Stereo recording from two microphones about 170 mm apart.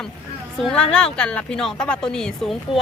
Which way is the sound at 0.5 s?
5° left (ahead or behind).